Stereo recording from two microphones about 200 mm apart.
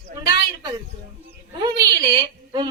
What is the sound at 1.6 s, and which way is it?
A man's voice, 20° right (ahead or behind).